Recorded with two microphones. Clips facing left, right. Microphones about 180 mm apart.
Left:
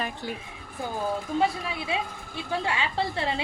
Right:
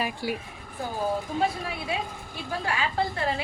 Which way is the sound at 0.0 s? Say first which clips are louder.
Right 3 dB; 10° right (ahead or behind).